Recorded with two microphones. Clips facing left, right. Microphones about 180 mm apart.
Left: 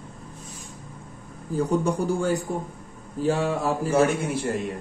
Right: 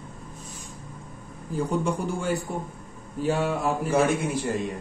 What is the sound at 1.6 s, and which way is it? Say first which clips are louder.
A man's voice: left 3 dB; 35° left (ahead or behind).